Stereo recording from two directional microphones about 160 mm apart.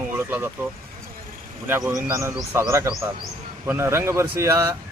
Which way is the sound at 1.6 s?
15° right (ahead or behind).